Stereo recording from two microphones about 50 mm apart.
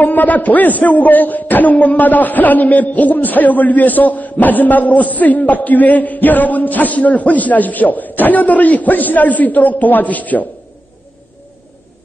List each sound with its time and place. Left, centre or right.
0.0 s a man's voice: left